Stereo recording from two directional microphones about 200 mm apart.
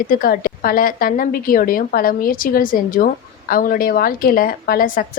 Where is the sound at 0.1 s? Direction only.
45° left (ahead or behind).